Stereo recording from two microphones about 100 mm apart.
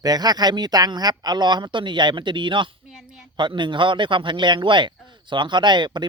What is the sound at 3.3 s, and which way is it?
Speech, 50° right (ahead or behind).